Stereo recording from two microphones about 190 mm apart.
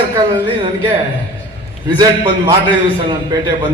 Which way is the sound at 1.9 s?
25° right (ahead or behind).